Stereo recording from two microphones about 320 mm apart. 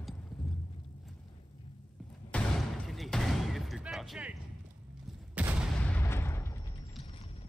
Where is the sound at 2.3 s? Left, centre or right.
Centre.